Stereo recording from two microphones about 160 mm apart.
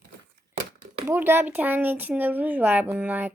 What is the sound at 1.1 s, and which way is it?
Speech, 15° right (ahead or behind).